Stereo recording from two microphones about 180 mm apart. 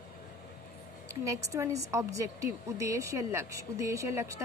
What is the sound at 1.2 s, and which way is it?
Speech, 15° right (ahead or behind).